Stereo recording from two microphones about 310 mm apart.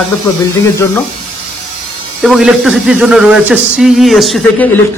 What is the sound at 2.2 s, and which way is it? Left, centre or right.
Speech, centre.